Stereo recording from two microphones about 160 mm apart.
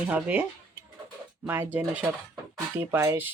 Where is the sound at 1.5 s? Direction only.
10° right (ahead or behind).